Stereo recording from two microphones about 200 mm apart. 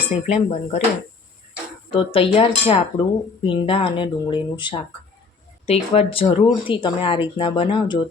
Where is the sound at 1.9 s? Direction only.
25° left (ahead or behind).